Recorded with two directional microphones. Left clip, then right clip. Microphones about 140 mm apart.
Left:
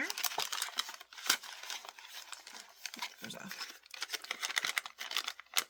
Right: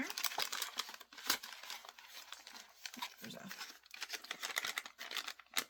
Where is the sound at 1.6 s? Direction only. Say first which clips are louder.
Left 5 dB; 35° left (ahead or behind).